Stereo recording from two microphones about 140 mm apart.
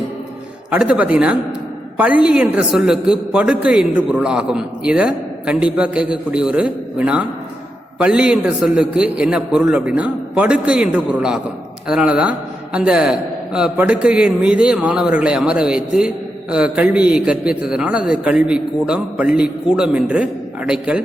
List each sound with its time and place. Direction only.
0.7 s a man's voice: 10° right (ahead or behind)